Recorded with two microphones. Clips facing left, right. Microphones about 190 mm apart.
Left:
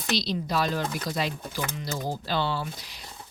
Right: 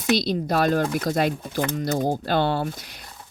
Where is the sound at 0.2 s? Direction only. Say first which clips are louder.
Right 5 dB; 50° right (ahead or behind).